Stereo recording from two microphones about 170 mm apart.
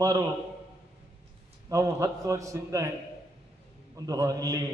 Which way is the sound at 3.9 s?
20° right (ahead or behind).